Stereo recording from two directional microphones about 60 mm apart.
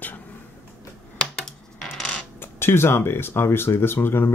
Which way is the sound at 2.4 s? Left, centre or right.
Left.